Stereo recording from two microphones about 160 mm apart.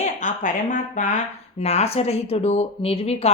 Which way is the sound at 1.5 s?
40° left (ahead or behind).